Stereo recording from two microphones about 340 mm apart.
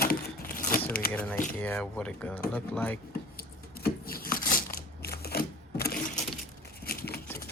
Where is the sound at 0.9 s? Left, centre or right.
Left.